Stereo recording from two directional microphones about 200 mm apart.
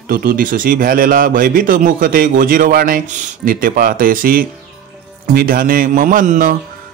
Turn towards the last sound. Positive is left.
turn(degrees=-40)  # may be behind; listen again after turning